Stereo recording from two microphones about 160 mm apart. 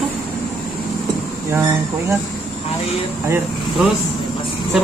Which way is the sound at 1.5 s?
15° right (ahead or behind).